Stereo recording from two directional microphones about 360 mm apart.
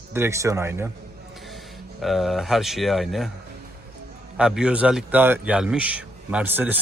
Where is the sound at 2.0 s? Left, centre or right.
Centre.